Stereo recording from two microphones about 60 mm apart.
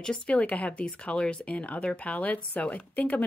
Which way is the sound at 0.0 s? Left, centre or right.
Centre.